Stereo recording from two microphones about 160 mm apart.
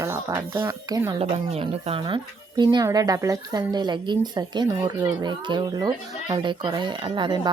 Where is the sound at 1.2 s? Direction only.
35° right (ahead or behind).